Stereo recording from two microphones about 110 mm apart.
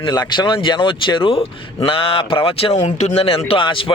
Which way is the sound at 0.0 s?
40° left (ahead or behind).